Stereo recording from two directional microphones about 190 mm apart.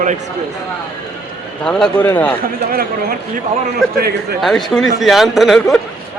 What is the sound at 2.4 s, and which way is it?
Speech, 50° right (ahead or behind).